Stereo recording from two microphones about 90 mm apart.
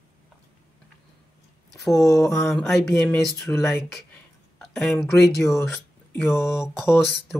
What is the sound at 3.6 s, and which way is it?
Speech, centre (ahead or behind).